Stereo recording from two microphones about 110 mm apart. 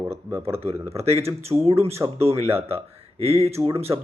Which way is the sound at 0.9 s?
70° right (ahead or behind).